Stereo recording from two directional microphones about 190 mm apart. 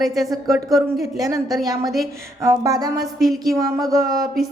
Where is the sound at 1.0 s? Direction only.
20° right (ahead or behind).